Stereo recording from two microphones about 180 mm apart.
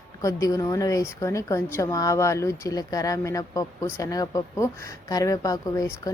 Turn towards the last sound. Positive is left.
turn(degrees=20)  # may be behind; listen again after turning